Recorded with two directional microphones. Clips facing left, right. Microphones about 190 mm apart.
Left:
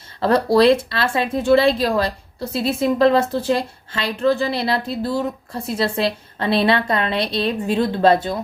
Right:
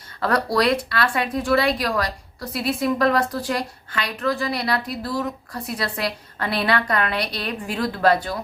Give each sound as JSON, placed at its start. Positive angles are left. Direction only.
{"t": 0.2, "sound": "speech", "side_deg": 25}